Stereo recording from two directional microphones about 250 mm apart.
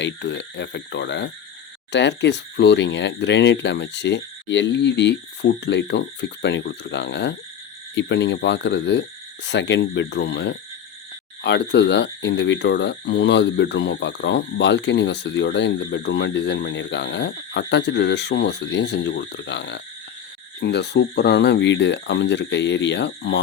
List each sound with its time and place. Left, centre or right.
0.0 s speech: left